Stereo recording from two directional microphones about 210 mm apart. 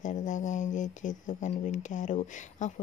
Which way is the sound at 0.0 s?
35° left (ahead or behind).